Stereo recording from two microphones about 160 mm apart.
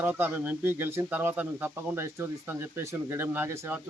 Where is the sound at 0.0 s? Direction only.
10° right (ahead or behind).